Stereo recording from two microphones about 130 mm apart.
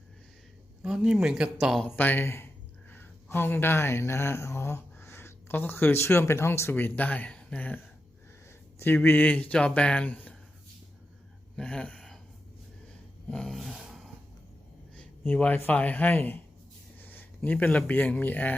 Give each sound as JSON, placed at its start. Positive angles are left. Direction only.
{"t": 0.8, "sound": "speech", "side_deg": -5}
{"t": 2.0, "sound": "speech", "side_deg": 15}
{"t": 11.5, "sound": "a sound", "side_deg": 5}
{"t": 13.2, "sound": "dog", "side_deg": 5}
{"t": 14.9, "sound": "speech", "side_deg": 10}